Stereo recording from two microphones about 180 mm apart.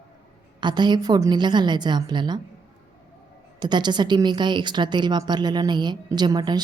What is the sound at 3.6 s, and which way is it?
A woman's voice, 25° right (ahead or behind).